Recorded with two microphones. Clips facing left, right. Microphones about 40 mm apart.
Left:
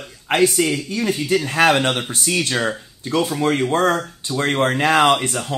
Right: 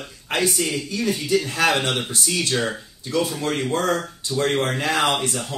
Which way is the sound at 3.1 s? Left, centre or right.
Left.